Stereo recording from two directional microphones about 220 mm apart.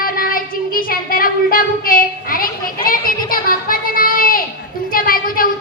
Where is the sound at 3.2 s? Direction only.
40° left (ahead or behind).